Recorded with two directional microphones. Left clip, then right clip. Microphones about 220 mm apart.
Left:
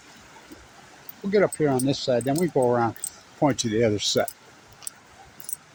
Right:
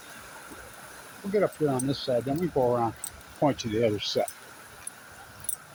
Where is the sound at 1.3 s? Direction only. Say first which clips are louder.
Left 4 dB; 45° left (ahead or behind).